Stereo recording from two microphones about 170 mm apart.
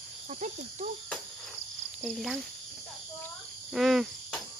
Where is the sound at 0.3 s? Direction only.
45° right (ahead or behind).